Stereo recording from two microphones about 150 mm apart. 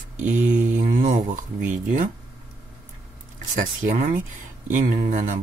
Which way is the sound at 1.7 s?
60° right (ahead or behind).